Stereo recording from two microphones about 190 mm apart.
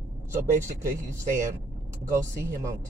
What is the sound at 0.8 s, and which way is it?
Speech, 15° right (ahead or behind).